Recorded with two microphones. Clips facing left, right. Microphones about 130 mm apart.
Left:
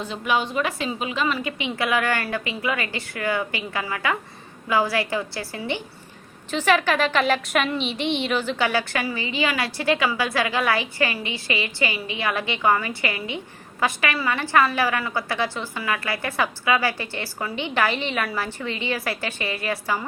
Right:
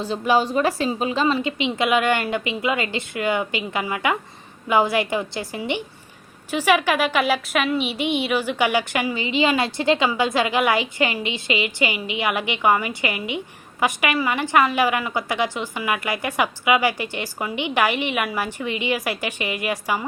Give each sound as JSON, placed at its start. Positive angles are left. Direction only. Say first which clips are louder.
{"t": 0.0, "sound": "a woman's voice", "louder": "right 5 dB", "side_deg": -35}